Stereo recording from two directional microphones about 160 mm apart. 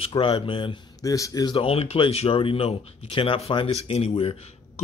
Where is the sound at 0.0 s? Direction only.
35° left (ahead or behind).